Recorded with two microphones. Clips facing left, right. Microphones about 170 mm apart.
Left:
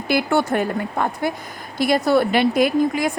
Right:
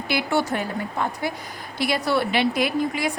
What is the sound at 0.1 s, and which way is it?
A woman's voice, 50° left (ahead or behind).